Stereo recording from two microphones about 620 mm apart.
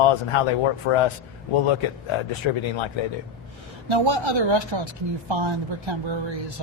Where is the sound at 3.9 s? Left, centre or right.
Right.